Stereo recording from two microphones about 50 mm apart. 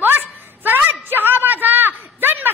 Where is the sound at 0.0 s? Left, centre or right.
Right.